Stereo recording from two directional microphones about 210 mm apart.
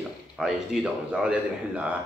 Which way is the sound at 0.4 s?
Centre (ahead or behind).